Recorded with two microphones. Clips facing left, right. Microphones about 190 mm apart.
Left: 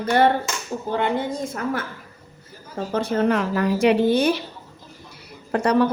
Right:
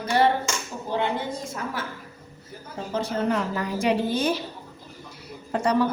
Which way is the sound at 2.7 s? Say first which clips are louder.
Left 5 dB; 60° left (ahead or behind).